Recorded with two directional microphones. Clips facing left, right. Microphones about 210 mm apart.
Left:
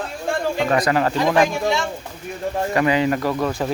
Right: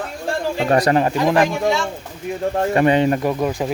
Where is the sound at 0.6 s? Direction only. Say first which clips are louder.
Right 4 dB; 35° right (ahead or behind).